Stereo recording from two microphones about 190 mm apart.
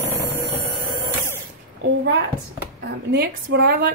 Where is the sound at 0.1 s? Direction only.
10° right (ahead or behind).